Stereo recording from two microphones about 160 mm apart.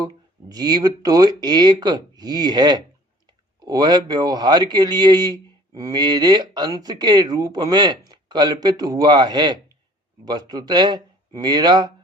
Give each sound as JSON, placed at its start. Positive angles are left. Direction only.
{"t": 0.0, "sound": "a man's voice", "side_deg": -25}